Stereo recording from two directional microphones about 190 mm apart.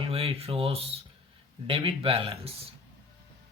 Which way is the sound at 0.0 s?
30° right (ahead or behind).